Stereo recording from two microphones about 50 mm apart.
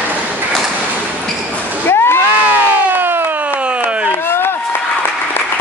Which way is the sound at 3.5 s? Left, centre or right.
Right.